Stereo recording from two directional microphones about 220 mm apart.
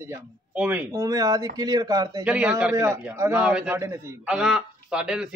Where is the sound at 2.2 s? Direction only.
5° right (ahead or behind).